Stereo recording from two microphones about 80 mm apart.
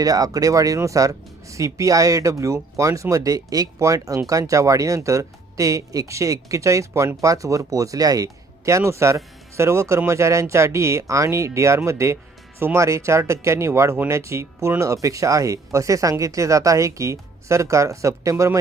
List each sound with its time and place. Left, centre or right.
0.0 s speech: right